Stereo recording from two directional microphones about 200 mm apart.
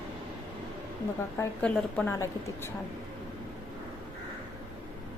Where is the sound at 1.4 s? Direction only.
5° left (ahead or behind).